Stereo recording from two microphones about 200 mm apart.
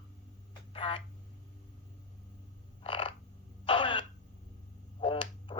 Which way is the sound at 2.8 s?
25° left (ahead or behind).